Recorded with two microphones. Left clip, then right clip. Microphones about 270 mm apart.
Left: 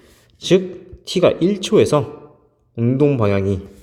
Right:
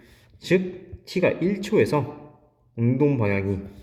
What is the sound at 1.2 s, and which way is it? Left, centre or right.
Speech, left.